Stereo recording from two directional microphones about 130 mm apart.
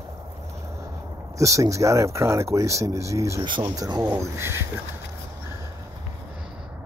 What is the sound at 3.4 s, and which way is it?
Speech, 35° right (ahead or behind).